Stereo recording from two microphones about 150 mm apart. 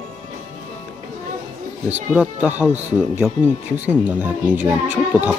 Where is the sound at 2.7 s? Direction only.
50° right (ahead or behind).